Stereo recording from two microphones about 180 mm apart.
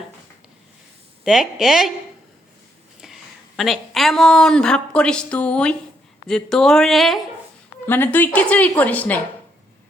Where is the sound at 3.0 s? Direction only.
Centre (ahead or behind).